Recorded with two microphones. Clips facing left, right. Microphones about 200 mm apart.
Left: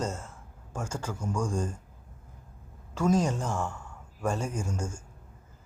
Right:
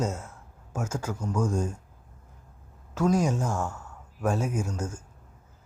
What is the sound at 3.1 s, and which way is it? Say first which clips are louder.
Speech: even; 10° right (ahead or behind).